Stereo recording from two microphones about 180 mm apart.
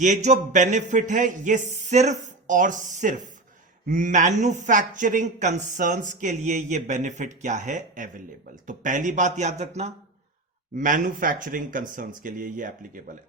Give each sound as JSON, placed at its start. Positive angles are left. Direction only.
{"t": 0.0, "sound": "speech", "side_deg": -40}